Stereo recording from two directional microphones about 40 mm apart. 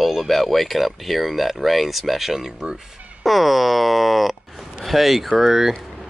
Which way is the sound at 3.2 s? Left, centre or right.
Centre.